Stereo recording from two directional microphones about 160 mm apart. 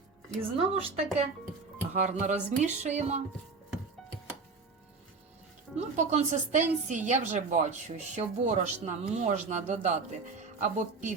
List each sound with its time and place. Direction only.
0.5 s speech: 35° right (ahead or behind)
1.9 s a woman's voice: 50° right (ahead or behind)
5.7 s a woman's voice: 45° right (ahead or behind)